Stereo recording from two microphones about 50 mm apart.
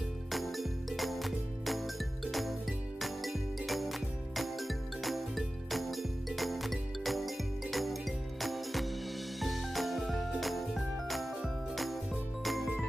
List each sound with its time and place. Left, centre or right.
0.3 s music: centre
3.0 s music: centre